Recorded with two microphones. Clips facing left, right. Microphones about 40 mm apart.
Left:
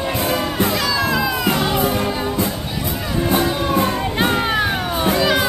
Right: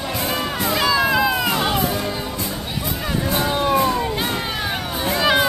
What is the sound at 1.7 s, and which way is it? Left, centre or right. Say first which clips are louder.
Music: left 3 dB; left.